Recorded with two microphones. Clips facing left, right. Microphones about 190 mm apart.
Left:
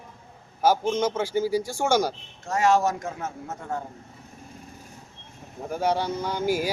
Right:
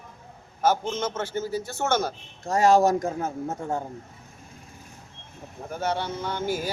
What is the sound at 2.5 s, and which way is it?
Speech, 35° right (ahead or behind).